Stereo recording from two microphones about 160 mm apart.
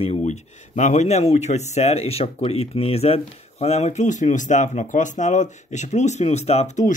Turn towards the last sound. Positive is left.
turn(degrees=45)  # may be behind; listen again after turning